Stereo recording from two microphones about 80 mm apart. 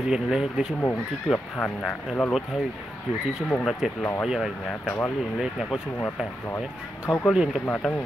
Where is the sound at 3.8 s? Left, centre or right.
Centre.